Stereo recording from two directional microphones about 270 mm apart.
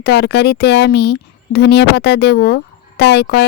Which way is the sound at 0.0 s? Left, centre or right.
Left.